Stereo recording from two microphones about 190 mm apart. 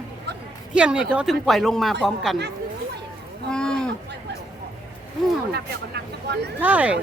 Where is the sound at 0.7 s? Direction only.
5° right (ahead or behind).